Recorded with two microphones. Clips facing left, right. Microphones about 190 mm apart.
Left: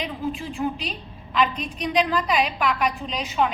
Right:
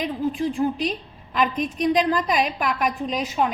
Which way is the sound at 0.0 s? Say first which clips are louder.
Right 5 dB; 45° right (ahead or behind).